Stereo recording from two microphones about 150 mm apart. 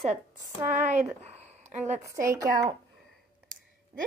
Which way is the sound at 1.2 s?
45° right (ahead or behind).